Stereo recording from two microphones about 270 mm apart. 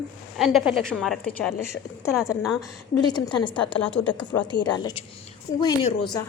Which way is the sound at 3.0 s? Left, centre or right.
Centre.